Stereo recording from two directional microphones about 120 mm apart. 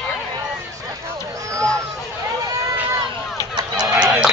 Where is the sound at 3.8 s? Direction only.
5° right (ahead or behind).